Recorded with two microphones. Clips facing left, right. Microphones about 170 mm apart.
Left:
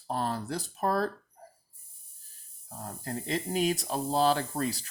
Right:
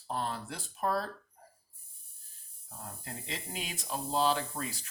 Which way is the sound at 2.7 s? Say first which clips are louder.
Left 7 dB; 40° left (ahead or behind).